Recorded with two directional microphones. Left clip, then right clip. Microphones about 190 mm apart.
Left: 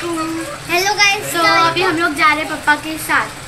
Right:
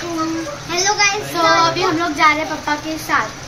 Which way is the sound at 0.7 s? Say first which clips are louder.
Left 3 dB; centre (ahead or behind).